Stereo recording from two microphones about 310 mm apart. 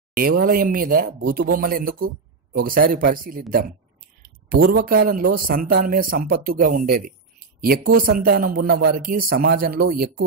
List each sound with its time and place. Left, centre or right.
0.1 s speech: right